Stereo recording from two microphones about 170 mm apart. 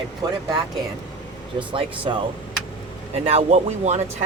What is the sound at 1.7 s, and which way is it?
Speech, 30° right (ahead or behind).